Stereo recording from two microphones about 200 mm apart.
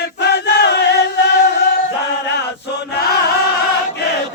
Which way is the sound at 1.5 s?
55° left (ahead or behind).